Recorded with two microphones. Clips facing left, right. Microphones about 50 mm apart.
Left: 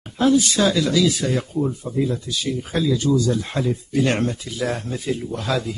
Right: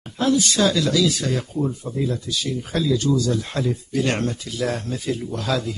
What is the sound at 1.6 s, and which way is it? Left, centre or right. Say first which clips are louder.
Speech: left 2 dB; centre.